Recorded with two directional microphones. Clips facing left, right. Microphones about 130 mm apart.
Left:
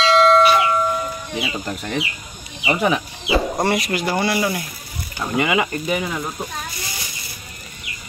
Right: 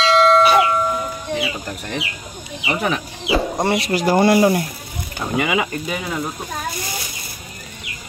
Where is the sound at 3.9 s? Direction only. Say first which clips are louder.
Right 6 dB; 40° right (ahead or behind).